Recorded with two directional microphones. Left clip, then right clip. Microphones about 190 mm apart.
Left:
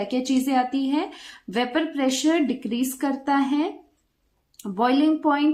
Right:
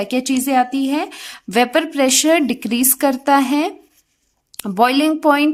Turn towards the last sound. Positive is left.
turn(degrees=-50)  # may be behind; listen again after turning